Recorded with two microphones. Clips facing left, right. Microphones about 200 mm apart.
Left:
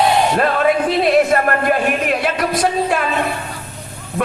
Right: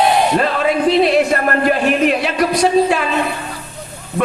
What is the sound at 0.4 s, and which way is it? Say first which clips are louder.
A man's voice: even; 50° left (ahead or behind).